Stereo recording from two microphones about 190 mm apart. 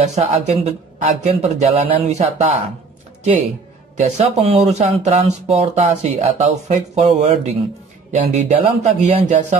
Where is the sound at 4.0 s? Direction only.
35° right (ahead or behind).